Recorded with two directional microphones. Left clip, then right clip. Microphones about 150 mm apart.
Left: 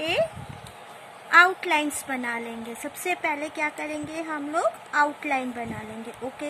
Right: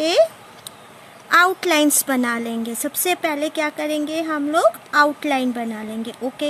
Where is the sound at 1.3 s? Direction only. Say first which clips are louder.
Right 3 dB; 90° right.